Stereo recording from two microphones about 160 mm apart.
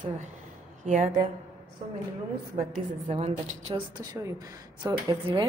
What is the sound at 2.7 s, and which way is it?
A woman's voice, 45° right (ahead or behind).